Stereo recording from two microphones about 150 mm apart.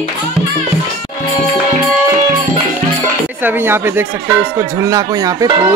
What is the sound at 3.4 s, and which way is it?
Speech, 15° right (ahead or behind).